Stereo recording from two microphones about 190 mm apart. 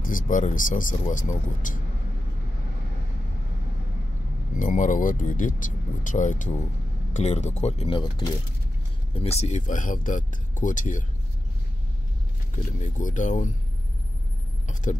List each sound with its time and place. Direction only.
0.0 s speech: 45° left (ahead or behind)
4.6 s speech: 45° left (ahead or behind)
12.8 s speech: 40° left (ahead or behind)
14.9 s speech: 40° left (ahead or behind)